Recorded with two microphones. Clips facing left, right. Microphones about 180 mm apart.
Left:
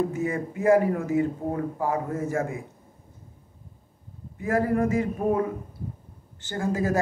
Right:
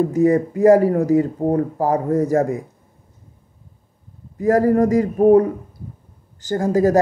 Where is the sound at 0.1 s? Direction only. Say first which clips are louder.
Right 12 dB; 40° right (ahead or behind).